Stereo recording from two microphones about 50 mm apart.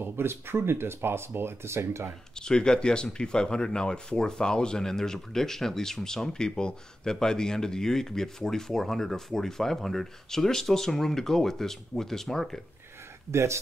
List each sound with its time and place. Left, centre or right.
0.0 s speech: right
2.3 s speech: centre
13.3 s speech: right